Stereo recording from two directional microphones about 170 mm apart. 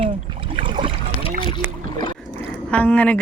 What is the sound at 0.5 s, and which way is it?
Boat, 30° right (ahead or behind).